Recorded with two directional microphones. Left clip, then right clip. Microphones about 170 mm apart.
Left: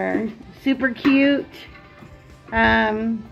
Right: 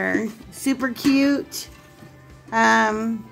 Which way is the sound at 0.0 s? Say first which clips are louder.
Even; 20° right (ahead or behind).